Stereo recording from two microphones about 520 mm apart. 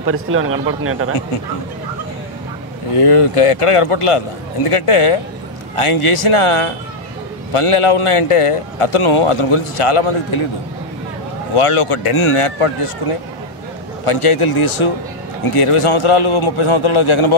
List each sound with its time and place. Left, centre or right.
0.0 s a man's voice: right
3.0 s a man's voice: left
11.5 s a man's voice: left